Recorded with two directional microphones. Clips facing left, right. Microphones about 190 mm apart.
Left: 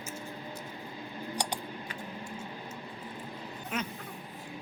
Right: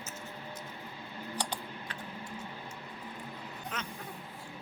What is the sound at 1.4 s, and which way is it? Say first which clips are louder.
Typing: left 2 dB; 15° left (ahead or behind).